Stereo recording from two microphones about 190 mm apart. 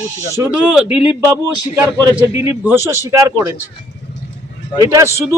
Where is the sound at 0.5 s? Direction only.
5° right (ahead or behind).